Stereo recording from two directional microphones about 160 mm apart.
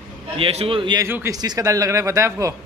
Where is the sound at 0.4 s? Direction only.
40° right (ahead or behind).